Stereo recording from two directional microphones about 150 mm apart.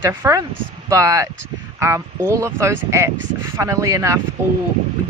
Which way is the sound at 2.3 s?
20° right (ahead or behind).